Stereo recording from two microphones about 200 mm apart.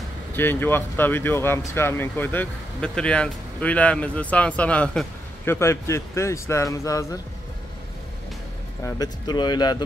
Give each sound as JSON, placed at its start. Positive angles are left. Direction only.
{"t": 0.3, "sound": "speech", "side_deg": 10}
{"t": 8.8, "sound": "speech", "side_deg": 20}